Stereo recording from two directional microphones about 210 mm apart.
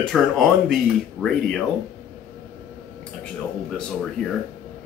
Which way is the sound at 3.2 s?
5° left (ahead or behind).